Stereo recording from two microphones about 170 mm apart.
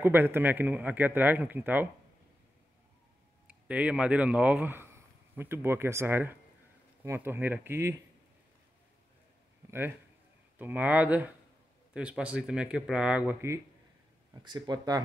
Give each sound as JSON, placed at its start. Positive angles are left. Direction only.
{"t": 0.0, "sound": "speech", "side_deg": -15}
{"t": 3.4, "sound": "speech", "side_deg": -5}
{"t": 9.7, "sound": "a man's voice", "side_deg": -15}
{"t": 14.4, "sound": "speech", "side_deg": -25}